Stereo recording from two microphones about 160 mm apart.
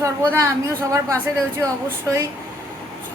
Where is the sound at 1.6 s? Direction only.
20° right (ahead or behind).